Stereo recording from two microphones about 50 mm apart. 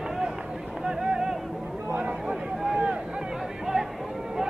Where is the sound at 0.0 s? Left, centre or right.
Centre.